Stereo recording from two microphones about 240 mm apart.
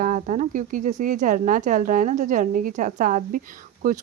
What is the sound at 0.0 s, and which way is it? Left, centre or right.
Speech, right.